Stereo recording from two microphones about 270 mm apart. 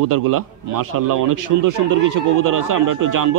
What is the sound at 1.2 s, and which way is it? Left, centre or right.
Speech, right.